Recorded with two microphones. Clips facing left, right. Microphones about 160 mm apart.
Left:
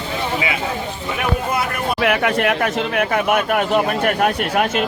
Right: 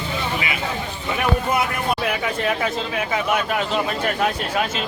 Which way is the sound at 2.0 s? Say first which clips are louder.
Left 6 dB; 75° left (ahead or behind).